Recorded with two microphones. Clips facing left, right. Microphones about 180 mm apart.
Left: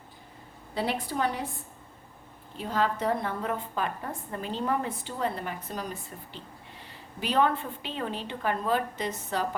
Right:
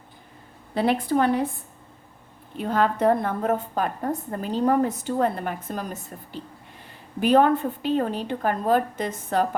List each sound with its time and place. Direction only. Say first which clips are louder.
0.7 s a woman's voice: right 8 dB; 55° right (ahead or behind)
2.6 s a woman's voice: right 6 dB; 55° right (ahead or behind)